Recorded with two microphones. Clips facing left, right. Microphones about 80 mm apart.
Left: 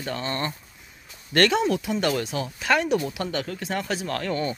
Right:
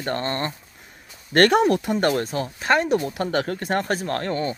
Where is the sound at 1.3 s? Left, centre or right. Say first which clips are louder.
Right 4 dB; right.